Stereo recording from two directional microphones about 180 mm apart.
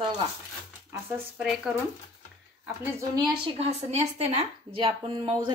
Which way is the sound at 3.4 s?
35° right (ahead or behind).